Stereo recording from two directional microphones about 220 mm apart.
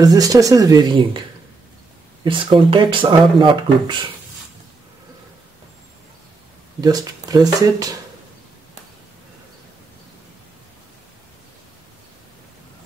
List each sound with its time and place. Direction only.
0.0 s speech: 15° right (ahead or behind)
2.2 s speech: 20° right (ahead or behind)
6.8 s speech: 15° right (ahead or behind)